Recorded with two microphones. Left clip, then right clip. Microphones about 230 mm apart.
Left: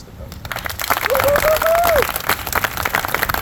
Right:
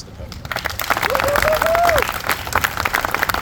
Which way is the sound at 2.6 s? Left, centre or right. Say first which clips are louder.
Right 2 dB; right.